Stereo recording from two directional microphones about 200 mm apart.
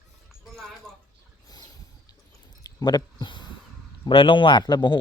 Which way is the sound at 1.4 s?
20° left (ahead or behind).